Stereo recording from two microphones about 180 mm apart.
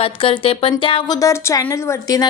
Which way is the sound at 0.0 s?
30° left (ahead or behind).